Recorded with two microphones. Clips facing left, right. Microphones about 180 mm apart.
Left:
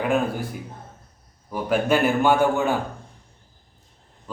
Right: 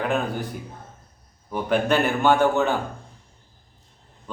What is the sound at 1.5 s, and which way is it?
Speech, 5° left (ahead or behind).